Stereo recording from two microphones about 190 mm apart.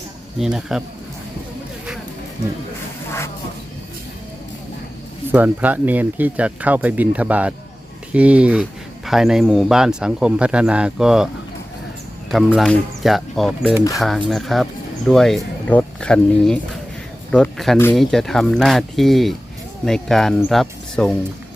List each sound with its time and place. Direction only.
0.3 s speech: centre (ahead or behind)
5.3 s speech: 10° right (ahead or behind)
12.3 s speech: centre (ahead or behind)